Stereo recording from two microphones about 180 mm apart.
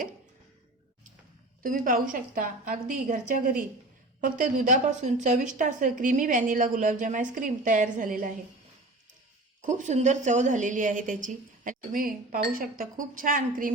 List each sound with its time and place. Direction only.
1.6 s a woman's voice: 50° right (ahead or behind)
9.6 s a woman's voice: 40° right (ahead or behind)